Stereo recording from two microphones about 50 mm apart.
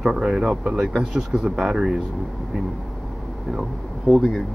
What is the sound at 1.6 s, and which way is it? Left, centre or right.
Speech, centre.